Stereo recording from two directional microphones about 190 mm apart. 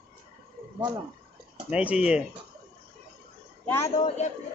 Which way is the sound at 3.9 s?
35° left (ahead or behind).